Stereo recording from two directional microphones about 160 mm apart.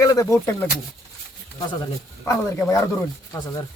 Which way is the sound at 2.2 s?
10° left (ahead or behind).